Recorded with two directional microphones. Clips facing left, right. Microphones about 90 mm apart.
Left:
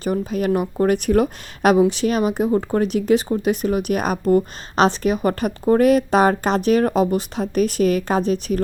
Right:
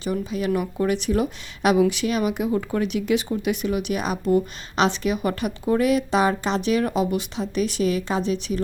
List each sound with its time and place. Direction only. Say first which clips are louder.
0.0 s speech: left 4 dB; 45° left (ahead or behind)
1.8 s speech: left 3 dB; 35° left (ahead or behind)